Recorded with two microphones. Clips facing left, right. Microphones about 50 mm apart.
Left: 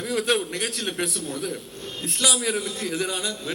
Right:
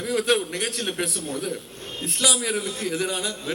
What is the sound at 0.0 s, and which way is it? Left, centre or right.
A man's voice, centre.